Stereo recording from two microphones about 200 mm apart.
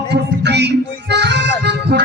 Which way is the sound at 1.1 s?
60° right (ahead or behind).